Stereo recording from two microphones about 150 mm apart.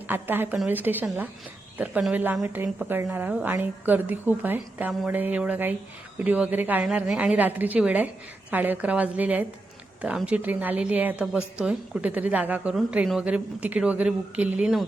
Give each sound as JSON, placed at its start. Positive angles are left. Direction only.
{"t": 0.1, "sound": "a woman's voice", "side_deg": -15}